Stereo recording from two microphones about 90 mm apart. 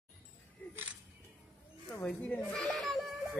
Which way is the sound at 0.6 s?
20° left (ahead or behind).